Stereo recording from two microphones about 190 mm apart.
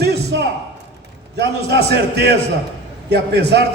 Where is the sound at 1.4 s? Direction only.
60° right (ahead or behind).